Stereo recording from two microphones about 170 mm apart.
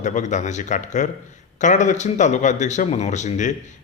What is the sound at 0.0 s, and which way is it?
A man's voice, 45° left (ahead or behind).